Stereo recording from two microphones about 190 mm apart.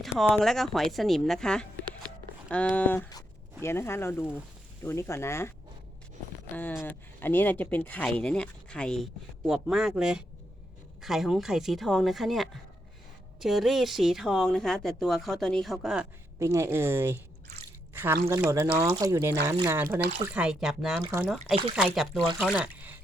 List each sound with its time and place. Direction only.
0.2 s speech: centre (ahead or behind)
6.5 s speech: 10° left (ahead or behind)
16.4 s speech: 15° right (ahead or behind)